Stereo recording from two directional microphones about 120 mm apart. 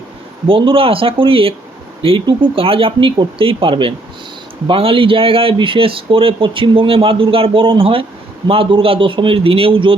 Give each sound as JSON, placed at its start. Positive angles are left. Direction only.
{"t": 0.4, "sound": "speech", "side_deg": -45}